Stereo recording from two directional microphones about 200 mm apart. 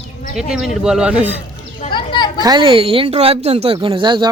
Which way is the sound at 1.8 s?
25° left (ahead or behind).